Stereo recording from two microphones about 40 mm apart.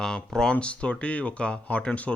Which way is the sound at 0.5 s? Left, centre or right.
Left.